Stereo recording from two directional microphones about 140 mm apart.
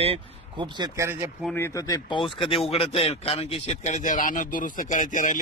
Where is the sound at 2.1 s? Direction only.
35° left (ahead or behind).